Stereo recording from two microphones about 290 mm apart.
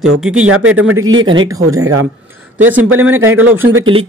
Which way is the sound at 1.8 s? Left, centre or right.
Right.